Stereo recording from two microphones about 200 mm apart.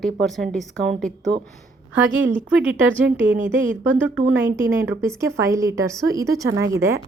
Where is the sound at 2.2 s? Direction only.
5° right (ahead or behind).